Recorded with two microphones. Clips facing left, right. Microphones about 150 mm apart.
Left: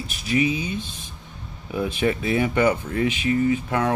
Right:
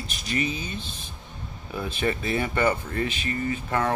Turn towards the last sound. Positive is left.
turn(degrees=10)  # may be behind; listen again after turning